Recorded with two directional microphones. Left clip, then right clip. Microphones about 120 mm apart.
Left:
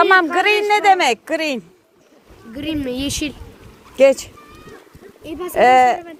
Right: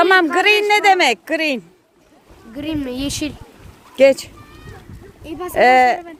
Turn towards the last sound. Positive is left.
turn(degrees=-25)  # may be behind; listen again after turning